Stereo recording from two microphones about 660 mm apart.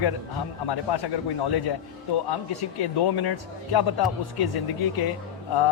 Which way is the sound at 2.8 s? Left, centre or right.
Left.